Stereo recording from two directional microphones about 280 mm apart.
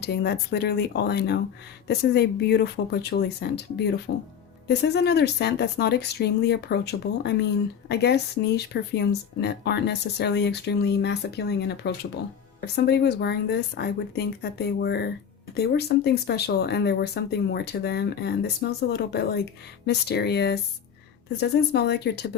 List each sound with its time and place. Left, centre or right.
0.0 s speech: left